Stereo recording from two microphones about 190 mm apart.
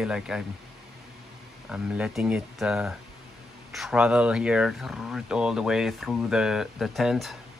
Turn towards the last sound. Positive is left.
turn(degrees=0)  # may be behind; listen again after turning